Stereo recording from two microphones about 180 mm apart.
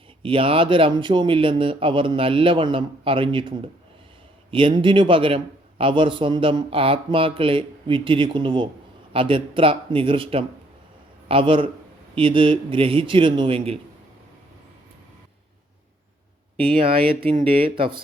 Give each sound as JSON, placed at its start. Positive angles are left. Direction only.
{"t": 0.2, "sound": "speech", "side_deg": -30}
{"t": 16.6, "sound": "speech", "side_deg": -30}